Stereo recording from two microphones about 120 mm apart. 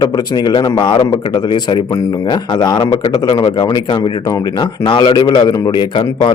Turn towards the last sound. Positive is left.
turn(degrees=40)  # may be behind; listen again after turning